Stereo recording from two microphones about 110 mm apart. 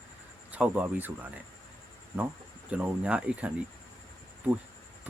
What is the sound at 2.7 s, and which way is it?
Speech, 10° right (ahead or behind).